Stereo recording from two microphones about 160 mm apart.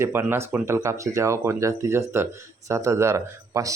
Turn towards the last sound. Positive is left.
turn(degrees=-20)  # may be behind; listen again after turning